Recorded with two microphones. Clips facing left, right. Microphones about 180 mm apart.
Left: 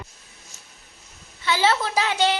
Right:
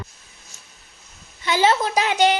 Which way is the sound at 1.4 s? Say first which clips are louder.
Right 3 dB; 15° right (ahead or behind).